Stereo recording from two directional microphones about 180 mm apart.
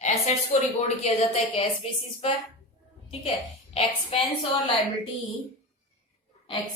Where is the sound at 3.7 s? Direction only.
30° left (ahead or behind).